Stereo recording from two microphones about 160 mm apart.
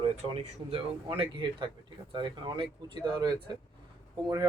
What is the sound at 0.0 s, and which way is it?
A man's voice, 35° right (ahead or behind).